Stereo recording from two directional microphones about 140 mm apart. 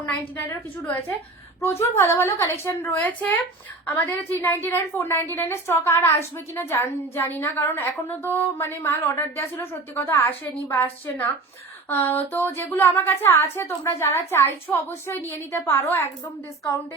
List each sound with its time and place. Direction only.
0.0 s a woman's voice: 15° left (ahead or behind)
1.8 s a woman's voice: 20° left (ahead or behind)